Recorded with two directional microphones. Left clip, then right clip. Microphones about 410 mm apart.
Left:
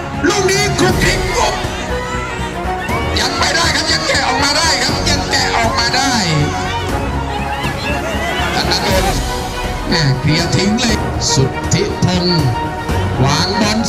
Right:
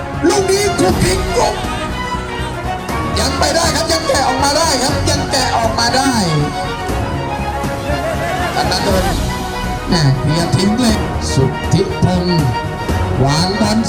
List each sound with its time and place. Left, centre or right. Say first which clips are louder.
0.3 s music: right 1 dB; right
3.2 s music: even; right
9.9 s speech: left 1 dB; centre
13.2 s music: left 1 dB; right